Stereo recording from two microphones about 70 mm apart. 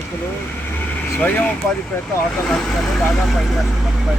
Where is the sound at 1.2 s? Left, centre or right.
Left.